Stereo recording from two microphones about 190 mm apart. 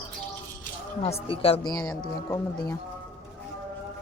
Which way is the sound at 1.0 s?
30° left (ahead or behind).